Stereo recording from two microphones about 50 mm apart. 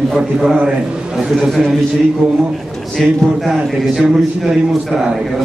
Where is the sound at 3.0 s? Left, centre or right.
Centre.